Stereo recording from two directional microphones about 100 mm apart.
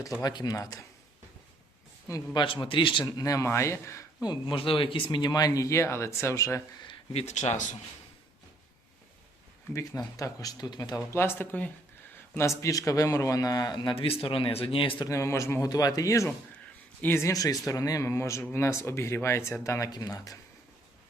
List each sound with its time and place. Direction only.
0.2 s a man's voice: 40° left (ahead or behind)
2.3 s a man's voice: 55° left (ahead or behind)
3.2 s speech: 35° left (ahead or behind)
4.2 s a man's voice: 50° left (ahead or behind); by 6.6 s 30° left (ahead or behind)
7.1 s speech: 90° left
10.2 s a man's voice: 35° left (ahead or behind)
11.1 s a man's voice: 25° left (ahead or behind); by 14.9 s 60° left (ahead or behind)
14.9 s speech: 35° left (ahead or behind)
15.7 s a man's voice: 40° left (ahead or behind)
17.3 s a man's voice: 35° left (ahead or behind)